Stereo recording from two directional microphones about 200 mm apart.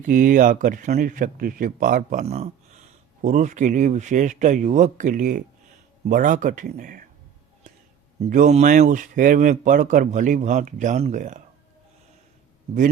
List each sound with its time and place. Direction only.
0.0 s speech: 40° right (ahead or behind)
8.3 s speech: 40° right (ahead or behind)